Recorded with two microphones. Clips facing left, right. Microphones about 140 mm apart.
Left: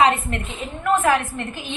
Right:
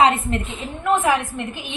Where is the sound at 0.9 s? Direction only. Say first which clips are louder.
Even; 10° right (ahead or behind).